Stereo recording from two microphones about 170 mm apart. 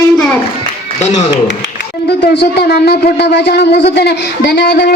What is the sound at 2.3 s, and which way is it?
A man's voice, 75° left (ahead or behind).